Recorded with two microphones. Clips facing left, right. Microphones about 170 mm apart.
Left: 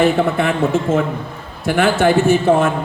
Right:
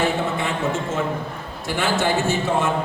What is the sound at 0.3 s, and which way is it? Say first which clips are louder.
A man's voice: left 7 dB; 60° left (ahead or behind).